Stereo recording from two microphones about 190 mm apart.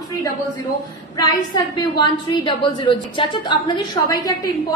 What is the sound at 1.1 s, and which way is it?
A woman's voice, 20° left (ahead or behind).